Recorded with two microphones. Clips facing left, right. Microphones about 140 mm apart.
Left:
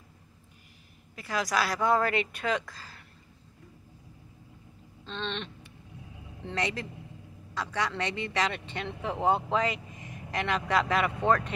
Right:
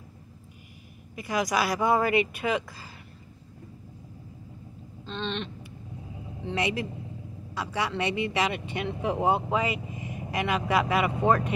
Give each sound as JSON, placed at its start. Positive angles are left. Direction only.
{"t": 1.1, "sound": "speech", "side_deg": -15}
{"t": 5.0, "sound": "a sound", "side_deg": 0}
{"t": 6.4, "sound": "speech", "side_deg": -10}